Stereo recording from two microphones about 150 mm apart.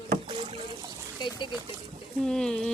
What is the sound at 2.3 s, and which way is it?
Speech, 5° left (ahead or behind).